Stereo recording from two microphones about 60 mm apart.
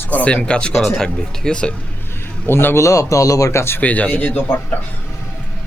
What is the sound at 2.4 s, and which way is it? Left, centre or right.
A man's voice, left.